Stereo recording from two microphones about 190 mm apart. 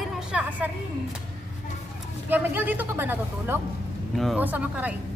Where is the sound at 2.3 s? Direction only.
10° right (ahead or behind).